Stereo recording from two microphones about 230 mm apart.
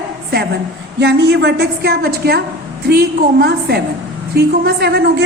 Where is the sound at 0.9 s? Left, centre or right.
Right.